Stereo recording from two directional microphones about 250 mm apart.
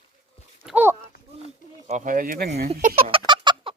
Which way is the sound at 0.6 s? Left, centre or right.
Centre.